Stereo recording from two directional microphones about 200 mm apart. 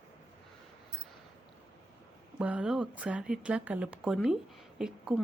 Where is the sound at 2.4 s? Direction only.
5° right (ahead or behind).